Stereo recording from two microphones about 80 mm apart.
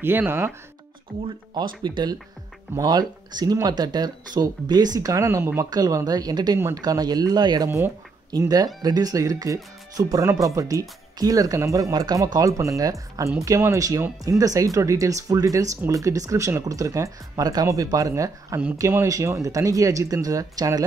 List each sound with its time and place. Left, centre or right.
0.0 s speech: right
1.5 s speech: right
2.8 s speech: right
5.7 s speech: right
17.6 s speech: right